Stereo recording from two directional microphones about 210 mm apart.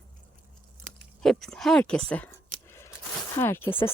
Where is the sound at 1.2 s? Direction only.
Centre (ahead or behind).